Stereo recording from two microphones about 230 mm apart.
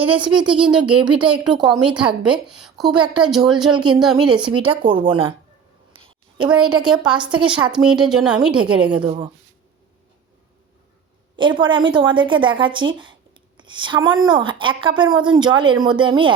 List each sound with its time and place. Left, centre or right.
0.3 s a woman's voice: centre
3.0 s speech: centre
4.0 s a woman's voice: centre
4.6 s speech: right
6.6 s speech: right
6.8 s a woman's voice: centre
7.4 s speech: right
7.7 s a woman's voice: centre
9.0 s speech: right
11.3 s speech: right